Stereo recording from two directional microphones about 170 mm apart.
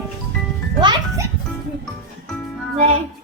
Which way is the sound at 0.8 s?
25° right (ahead or behind).